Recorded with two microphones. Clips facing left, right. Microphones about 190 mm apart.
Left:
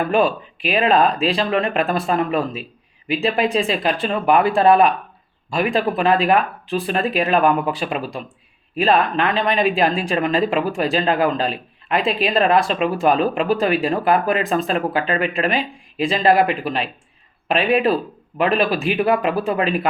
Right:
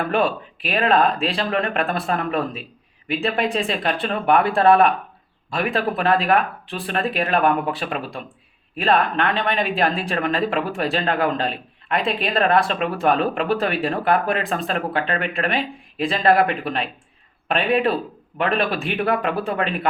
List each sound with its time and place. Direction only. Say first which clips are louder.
0.1 s speech: left 3 dB; centre (ahead or behind)
18.3 s speech: left 3 dB; 5° left (ahead or behind)